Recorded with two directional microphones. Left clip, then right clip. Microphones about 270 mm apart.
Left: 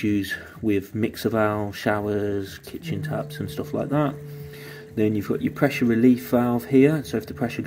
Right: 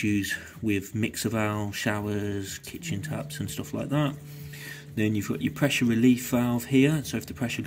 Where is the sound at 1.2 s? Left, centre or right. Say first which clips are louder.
Left 8 dB; right.